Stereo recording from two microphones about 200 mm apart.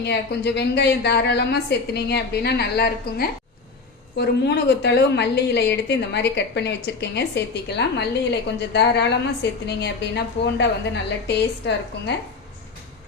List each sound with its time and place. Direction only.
0.0 s a woman's voice: 55° left (ahead or behind)